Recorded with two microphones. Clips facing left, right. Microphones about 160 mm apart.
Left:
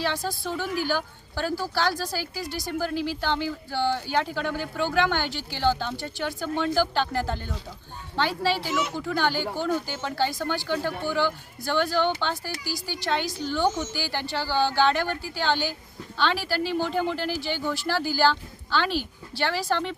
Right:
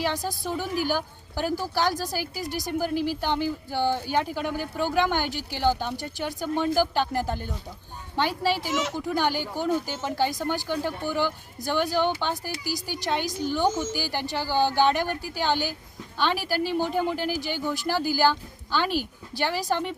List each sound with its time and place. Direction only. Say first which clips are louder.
0.0 s speech: even; 15° right (ahead or behind)
13.2 s a woman's voice: right 2 dB; 45° right (ahead or behind)
13.5 s speech: even; 10° right (ahead or behind)